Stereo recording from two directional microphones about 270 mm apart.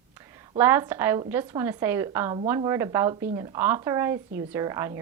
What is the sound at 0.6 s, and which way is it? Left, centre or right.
Speech, centre.